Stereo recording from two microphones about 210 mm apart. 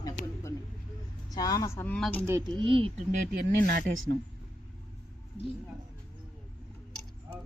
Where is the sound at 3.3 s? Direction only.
50° right (ahead or behind).